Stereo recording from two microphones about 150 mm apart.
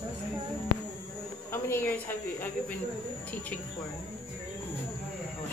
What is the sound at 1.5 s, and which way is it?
Speech, 20° left (ahead or behind).